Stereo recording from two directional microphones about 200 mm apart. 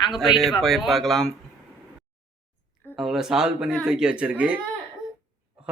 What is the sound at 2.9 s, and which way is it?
Speech, centre (ahead or behind).